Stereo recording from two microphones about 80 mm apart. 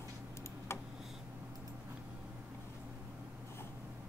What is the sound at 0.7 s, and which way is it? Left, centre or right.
Tick, left.